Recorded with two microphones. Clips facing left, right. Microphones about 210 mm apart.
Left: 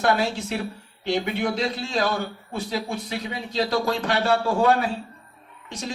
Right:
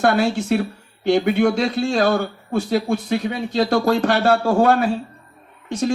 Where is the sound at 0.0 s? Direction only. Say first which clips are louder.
Right 5 dB; 50° right (ahead or behind).